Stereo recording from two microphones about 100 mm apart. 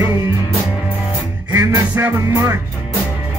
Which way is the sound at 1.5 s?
20° right (ahead or behind).